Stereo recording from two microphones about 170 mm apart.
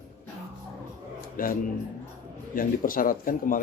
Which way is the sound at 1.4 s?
55° left (ahead or behind).